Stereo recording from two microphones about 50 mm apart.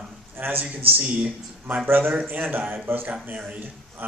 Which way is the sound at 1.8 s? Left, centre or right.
Right.